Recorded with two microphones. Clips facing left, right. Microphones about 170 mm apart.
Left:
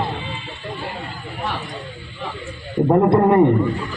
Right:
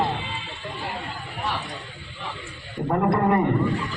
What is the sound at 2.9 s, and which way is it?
Speech, 25° left (ahead or behind).